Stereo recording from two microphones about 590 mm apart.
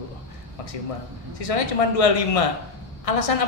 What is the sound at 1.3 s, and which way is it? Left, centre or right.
A woman's voice, left.